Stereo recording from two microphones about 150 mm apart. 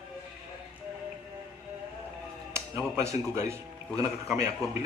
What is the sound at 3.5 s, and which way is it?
Speech, 20° right (ahead or behind).